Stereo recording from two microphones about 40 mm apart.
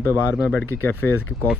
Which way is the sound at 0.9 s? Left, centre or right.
Left.